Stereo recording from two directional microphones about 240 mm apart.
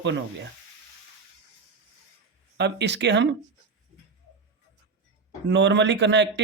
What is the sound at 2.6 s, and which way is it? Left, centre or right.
Speech, right.